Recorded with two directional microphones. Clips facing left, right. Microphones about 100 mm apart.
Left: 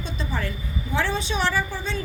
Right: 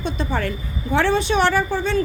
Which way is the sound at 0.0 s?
65° right (ahead or behind).